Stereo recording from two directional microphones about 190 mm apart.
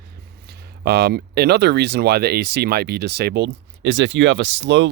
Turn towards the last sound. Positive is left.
turn(degrees=-70)  # may be behind; listen again after turning